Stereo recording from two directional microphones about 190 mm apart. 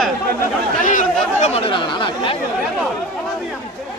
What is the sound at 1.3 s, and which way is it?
Chatter, 35° left (ahead or behind).